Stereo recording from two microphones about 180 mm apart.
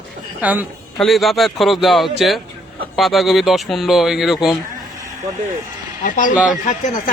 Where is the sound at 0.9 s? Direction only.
Centre (ahead or behind).